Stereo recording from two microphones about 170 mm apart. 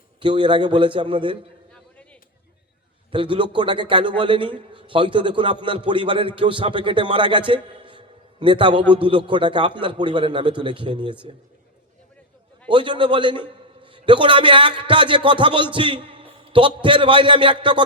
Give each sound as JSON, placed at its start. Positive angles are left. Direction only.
{"t": 0.2, "sound": "a man's voice", "side_deg": -30}
{"t": 3.1, "sound": "a man's voice", "side_deg": -30}
{"t": 12.6, "sound": "a man's voice", "side_deg": -30}